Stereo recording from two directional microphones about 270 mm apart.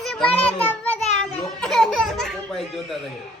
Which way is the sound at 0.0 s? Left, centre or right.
Centre.